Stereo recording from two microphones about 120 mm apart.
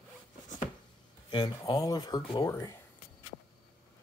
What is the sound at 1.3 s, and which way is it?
Speech, 35° left (ahead or behind).